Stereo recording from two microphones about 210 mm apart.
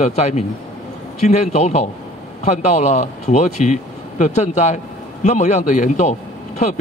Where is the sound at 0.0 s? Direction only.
30° left (ahead or behind).